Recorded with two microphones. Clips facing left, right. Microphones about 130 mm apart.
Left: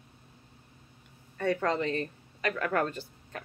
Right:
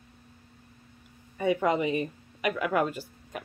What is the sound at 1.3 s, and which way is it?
Speech, 10° right (ahead or behind).